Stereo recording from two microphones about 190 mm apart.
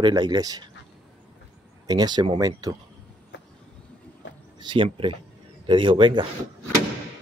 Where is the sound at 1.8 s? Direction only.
20° right (ahead or behind).